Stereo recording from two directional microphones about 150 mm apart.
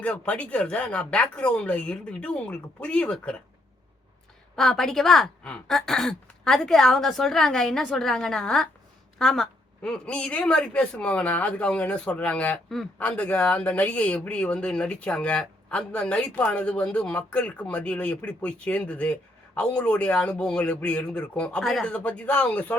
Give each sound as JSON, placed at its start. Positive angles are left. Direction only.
{"t": 0.0, "sound": "a woman's voice", "side_deg": 10}
{"t": 4.5, "sound": "a woman's voice", "side_deg": 5}